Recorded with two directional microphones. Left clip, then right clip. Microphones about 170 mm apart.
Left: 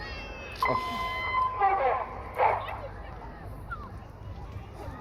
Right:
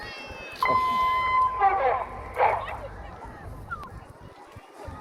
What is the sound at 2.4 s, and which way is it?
Bow-wow, 20° left (ahead or behind).